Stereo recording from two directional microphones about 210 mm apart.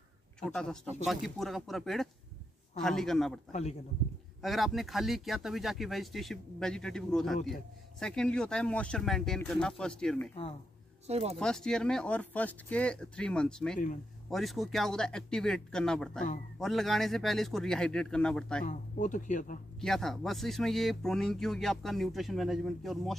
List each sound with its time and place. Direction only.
0.4 s speech: 5° left (ahead or behind)
4.4 s speech: centre (ahead or behind)
11.1 s speech: 30° right (ahead or behind)
11.3 s speech: 5° left (ahead or behind)
18.7 s speech: 35° left (ahead or behind)
19.8 s speech: centre (ahead or behind)